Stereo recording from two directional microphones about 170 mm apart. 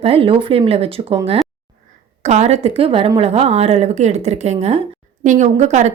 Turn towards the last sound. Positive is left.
turn(degrees=-40)  # may be behind; listen again after turning